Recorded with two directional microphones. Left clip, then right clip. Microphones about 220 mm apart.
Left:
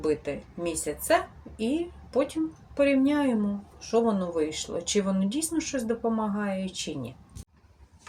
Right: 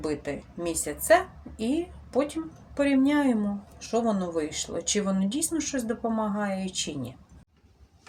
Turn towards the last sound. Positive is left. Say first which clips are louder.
# right 1 dB
turn(degrees=-5)  # may be behind; listen again after turning